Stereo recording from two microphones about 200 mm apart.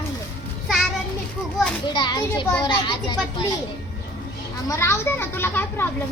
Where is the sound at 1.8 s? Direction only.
20° left (ahead or behind).